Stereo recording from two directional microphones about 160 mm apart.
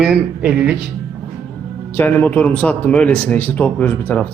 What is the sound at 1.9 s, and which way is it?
A man's voice, 10° left (ahead or behind).